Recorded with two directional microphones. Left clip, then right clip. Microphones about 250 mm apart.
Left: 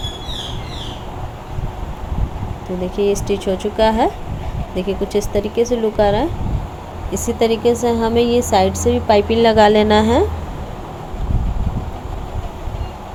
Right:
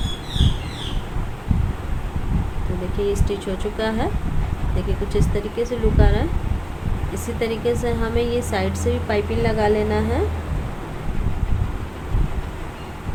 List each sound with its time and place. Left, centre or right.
3.2 s a woman's voice: left
5.3 s a woman's voice: left